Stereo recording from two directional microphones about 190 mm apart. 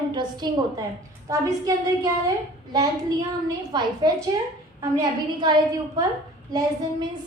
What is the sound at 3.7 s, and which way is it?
Speech, 20° right (ahead or behind).